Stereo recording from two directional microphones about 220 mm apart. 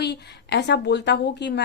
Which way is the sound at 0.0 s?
50° left (ahead or behind).